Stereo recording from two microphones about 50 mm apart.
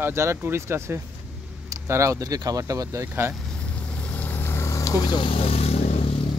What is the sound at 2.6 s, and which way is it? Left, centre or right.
Speech, right.